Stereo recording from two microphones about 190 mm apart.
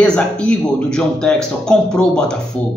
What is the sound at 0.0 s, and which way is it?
A man's voice, 5° left (ahead or behind).